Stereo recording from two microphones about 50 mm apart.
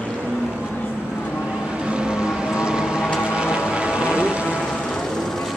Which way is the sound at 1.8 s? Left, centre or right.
Centre.